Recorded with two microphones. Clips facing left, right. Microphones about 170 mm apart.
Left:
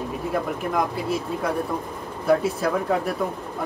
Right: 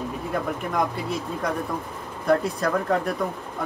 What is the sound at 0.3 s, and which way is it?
Speech, centre (ahead or behind).